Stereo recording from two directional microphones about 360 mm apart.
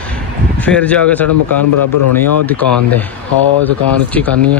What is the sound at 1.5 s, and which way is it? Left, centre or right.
Speech, left.